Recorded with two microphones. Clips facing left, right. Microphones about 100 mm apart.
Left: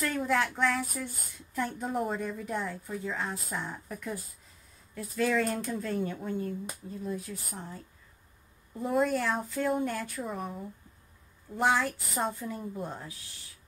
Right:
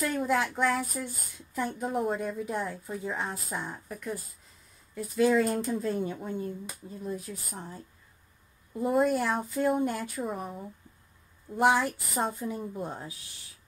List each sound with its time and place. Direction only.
0.0 s a woman's voice: 10° right (ahead or behind)
10.2 s a woman's voice: 5° right (ahead or behind)
11.5 s a woman's voice: 15° right (ahead or behind)
12.5 s a woman's voice: 5° right (ahead or behind)